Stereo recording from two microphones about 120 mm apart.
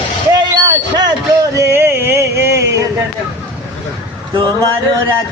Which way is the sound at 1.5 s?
20° right (ahead or behind).